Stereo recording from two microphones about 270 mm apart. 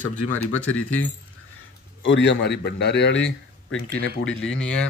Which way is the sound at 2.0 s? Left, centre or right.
Left.